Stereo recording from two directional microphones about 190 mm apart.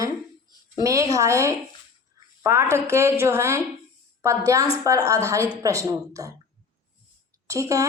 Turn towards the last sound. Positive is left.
turn(degrees=-15)  # may be behind; listen again after turning